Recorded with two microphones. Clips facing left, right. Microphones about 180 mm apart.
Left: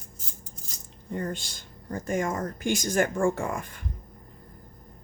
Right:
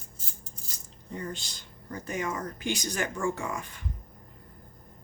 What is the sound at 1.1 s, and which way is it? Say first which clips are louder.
Speech: left 5 dB; 50° left (ahead or behind).